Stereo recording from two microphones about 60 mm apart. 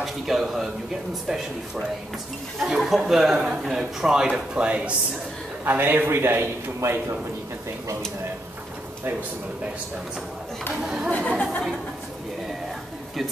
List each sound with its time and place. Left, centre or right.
0.0 s a man's voice: centre; by 4.9 s right
5.7 s a man's voice: right
10.7 s speech: centre
11.1 s speech: left